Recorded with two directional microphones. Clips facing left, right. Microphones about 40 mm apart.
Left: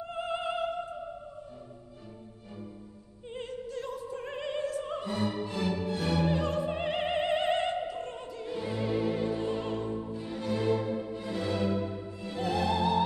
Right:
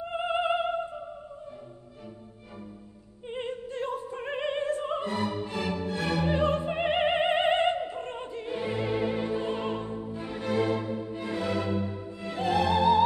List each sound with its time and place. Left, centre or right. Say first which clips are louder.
0.1 s music: right 6 dB; right
3.3 s opera: right 4 dB; right
6.2 s opera: right 3 dB; right
10.2 s music: right 5 dB; right
11.1 s music: right 4 dB; right